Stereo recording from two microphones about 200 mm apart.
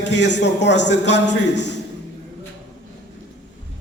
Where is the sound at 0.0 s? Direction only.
60° left (ahead or behind).